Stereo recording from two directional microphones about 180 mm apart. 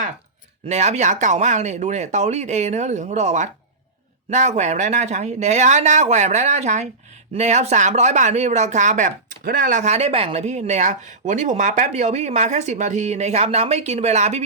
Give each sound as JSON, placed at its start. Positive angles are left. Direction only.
{"t": 0.7, "sound": "speech", "side_deg": -40}